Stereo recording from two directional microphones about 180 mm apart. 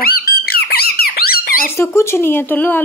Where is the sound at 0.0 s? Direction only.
60° left (ahead or behind).